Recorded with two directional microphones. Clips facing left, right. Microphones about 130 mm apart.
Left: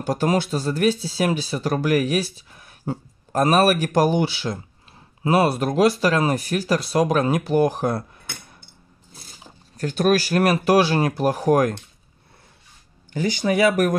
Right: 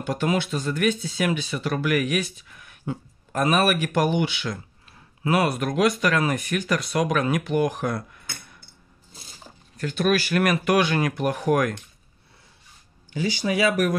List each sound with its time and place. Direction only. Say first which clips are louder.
0.0 s speech: left 3 dB; 40° left (ahead or behind)
9.8 s speech: left 3 dB; 40° left (ahead or behind)
13.1 s speech: left 3 dB; 50° left (ahead or behind)